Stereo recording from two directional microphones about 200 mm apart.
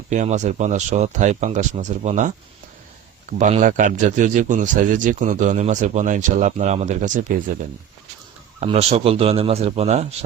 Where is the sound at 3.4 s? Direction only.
35° right (ahead or behind).